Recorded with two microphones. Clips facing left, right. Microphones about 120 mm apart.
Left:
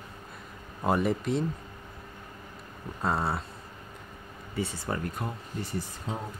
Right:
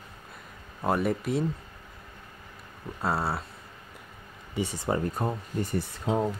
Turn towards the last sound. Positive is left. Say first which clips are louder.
# right 9 dB
turn(degrees=-90)